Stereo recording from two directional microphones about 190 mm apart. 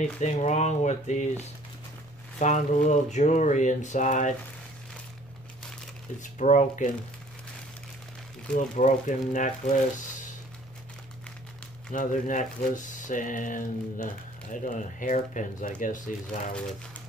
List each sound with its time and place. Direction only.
0.0 s speech: 35° left (ahead or behind)
2.3 s speech: 40° left (ahead or behind)
6.2 s speech: 40° left (ahead or behind)
8.5 s speech: 40° left (ahead or behind)
11.9 s speech: 40° left (ahead or behind)